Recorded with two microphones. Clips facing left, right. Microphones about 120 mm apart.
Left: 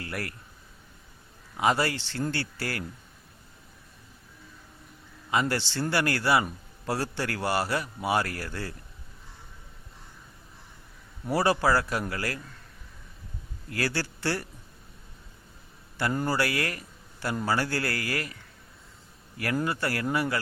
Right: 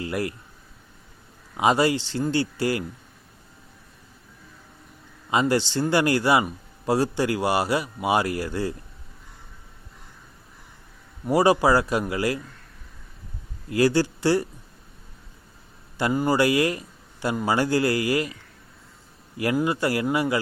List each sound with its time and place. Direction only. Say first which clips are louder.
0.0 s speech: right 8 dB; 20° right (ahead or behind)
1.5 s speech: right 5 dB; 20° right (ahead or behind)
5.3 s speech: right 6 dB; 20° right (ahead or behind)
11.3 s speech: right 6 dB; 15° right (ahead or behind)
13.7 s speech: right 10 dB; 15° right (ahead or behind)
16.1 s speech: right 8 dB; 15° right (ahead or behind)
19.6 s speech: right 6 dB; 15° right (ahead or behind)